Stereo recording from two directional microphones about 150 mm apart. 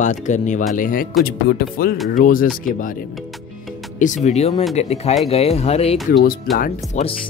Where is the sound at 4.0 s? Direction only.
50° left (ahead or behind).